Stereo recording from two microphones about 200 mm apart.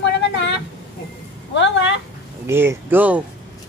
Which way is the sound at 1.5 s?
65° left (ahead or behind).